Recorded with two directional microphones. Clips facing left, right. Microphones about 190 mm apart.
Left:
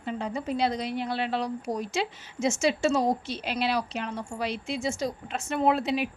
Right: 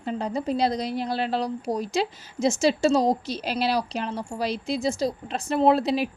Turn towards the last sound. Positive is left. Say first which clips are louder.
# right 4 dB
turn(degrees=-35)  # may be behind; listen again after turning